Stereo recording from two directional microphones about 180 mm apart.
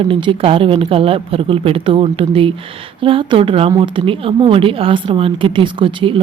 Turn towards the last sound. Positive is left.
turn(degrees=-30)  # may be behind; listen again after turning